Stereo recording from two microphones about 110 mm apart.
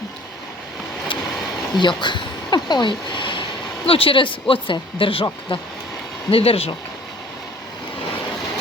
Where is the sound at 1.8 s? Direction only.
45° left (ahead or behind); by 6.7 s 60° left (ahead or behind).